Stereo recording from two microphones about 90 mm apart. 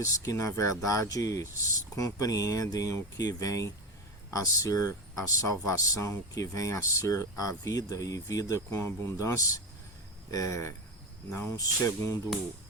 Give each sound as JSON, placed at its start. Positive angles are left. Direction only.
{"t": 0.0, "sound": "speech", "side_deg": 40}